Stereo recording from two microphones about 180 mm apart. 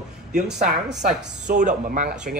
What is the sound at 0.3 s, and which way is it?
A man's voice, 40° right (ahead or behind).